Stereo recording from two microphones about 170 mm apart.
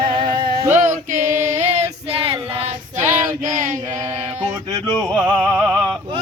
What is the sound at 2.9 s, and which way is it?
Female singing, 15° right (ahead or behind).